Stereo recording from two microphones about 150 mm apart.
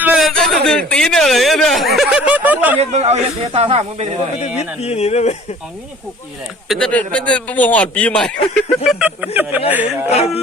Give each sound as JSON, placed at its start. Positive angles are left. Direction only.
{"t": 0.0, "sound": "speech", "side_deg": -5}
{"t": 2.9, "sound": "speech", "side_deg": -45}
{"t": 4.8, "sound": "speech", "side_deg": 45}
{"t": 6.7, "sound": "a man's voice", "side_deg": 5}
{"t": 10.1, "sound": "speech", "side_deg": 45}